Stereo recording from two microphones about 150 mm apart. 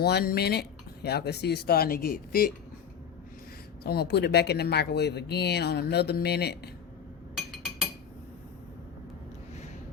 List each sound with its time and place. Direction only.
0.0 s speech: 90° left
3.8 s speech: 90° left